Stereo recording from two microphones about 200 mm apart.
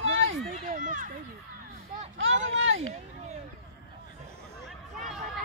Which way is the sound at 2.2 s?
70° right (ahead or behind).